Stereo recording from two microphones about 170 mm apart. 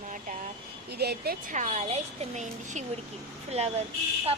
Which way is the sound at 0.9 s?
70° right (ahead or behind).